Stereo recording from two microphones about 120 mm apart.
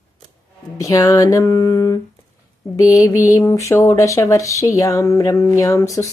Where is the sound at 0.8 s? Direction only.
25° left (ahead or behind).